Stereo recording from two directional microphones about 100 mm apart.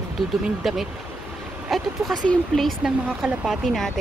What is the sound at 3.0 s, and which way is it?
Speech, 10° right (ahead or behind).